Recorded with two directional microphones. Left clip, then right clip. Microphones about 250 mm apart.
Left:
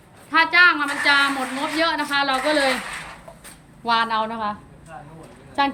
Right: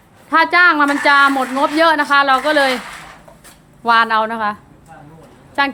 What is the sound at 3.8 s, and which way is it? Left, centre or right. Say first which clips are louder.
A woman's voice: right 7 dB; centre.